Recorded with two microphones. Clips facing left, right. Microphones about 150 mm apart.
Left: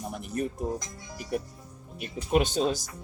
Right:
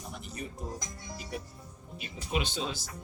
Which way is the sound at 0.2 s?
55° left (ahead or behind).